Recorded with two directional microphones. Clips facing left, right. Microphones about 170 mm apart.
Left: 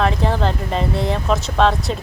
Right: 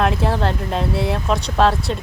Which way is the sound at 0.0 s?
5° right (ahead or behind).